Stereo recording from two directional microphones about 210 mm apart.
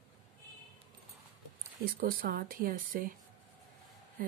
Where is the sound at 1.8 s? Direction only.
45° right (ahead or behind).